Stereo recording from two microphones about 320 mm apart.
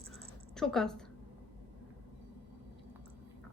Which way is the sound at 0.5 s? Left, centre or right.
Centre.